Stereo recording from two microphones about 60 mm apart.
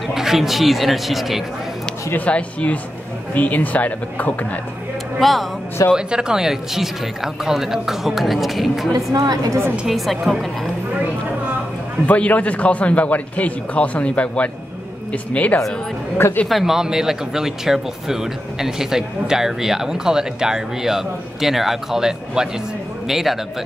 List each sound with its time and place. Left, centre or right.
0.1 s a man's voice: centre
2.1 s a man's voice: left
5.2 s a man's voice: centre
5.9 s a man's voice: centre
8.9 s a woman's voice: right
9.8 s a man's voice: centre
12.1 s a man's voice: left
16.4 s a man's voice: centre